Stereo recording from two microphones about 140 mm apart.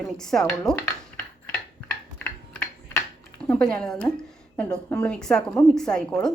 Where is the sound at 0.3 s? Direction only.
5° left (ahead or behind).